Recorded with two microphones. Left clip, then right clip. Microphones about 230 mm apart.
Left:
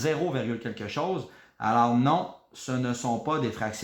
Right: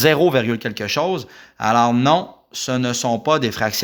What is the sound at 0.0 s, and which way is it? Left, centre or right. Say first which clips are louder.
Speech: right 13 dB; right.